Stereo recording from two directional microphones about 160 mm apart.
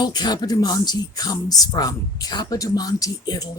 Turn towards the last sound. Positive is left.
turn(degrees=25)  # may be behind; listen again after turning